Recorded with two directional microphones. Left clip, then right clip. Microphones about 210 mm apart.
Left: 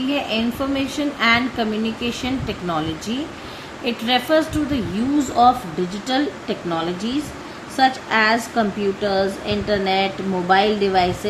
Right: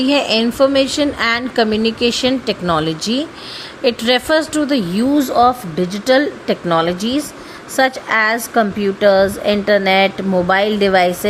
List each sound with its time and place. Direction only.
0.1 s speech: 45° right (ahead or behind)